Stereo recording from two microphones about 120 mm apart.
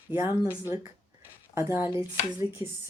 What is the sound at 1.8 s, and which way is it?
Speech, 45° left (ahead or behind).